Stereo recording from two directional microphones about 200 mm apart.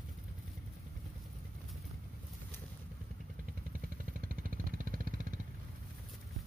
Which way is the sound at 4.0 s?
45° right (ahead or behind).